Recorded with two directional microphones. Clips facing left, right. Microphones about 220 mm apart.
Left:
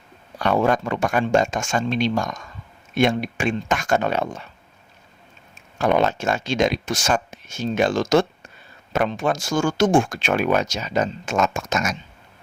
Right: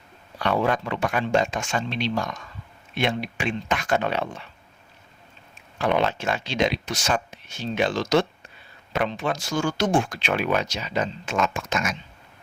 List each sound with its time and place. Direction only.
0.3 s speech: 45° left (ahead or behind)
5.8 s speech: 45° left (ahead or behind)